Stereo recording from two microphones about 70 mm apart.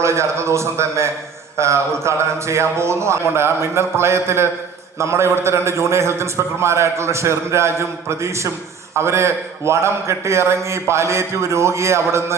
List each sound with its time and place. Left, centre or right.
0.0 s a man's voice: right